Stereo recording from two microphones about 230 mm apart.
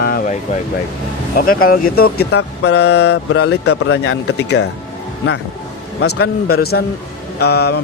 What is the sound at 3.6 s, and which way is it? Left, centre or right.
Speech, left.